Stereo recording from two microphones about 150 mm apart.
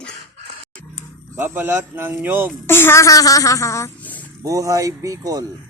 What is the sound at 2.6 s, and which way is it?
Speech, 15° left (ahead or behind).